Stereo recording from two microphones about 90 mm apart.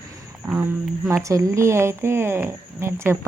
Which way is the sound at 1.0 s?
35° right (ahead or behind).